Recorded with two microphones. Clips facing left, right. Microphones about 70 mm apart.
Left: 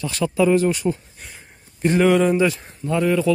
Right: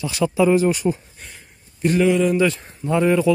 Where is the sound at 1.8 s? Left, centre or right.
Left.